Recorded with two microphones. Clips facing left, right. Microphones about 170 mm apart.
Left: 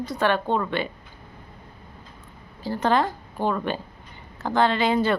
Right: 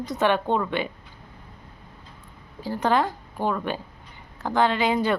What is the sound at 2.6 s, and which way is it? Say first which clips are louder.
Speech: left 1 dB; 10° right (ahead or behind).